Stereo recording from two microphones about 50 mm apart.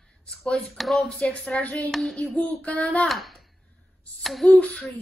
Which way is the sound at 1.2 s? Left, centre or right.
Left.